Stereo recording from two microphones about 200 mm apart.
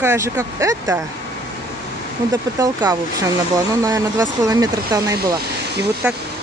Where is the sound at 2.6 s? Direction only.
15° right (ahead or behind).